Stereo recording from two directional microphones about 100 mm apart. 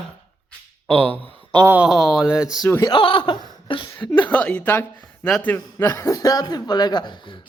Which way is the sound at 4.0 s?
15° left (ahead or behind).